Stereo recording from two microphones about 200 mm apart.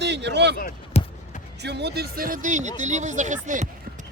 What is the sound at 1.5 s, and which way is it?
Speech, 55° right (ahead or behind).